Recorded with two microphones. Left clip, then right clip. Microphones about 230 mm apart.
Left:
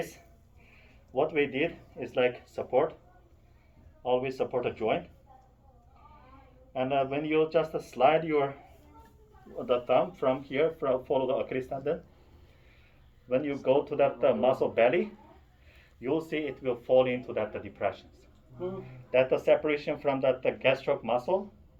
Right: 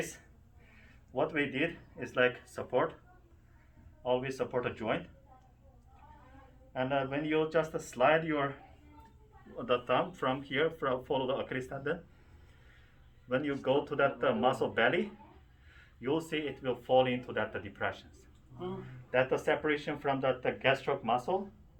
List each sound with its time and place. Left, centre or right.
1.1 s speech: right
4.0 s speech: right
6.7 s speech: right
9.6 s speech: right
13.2 s speech: right
16.0 s speech: right
19.1 s speech: right